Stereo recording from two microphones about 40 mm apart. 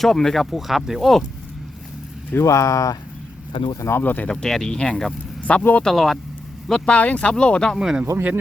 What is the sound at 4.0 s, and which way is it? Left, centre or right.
Speech, left.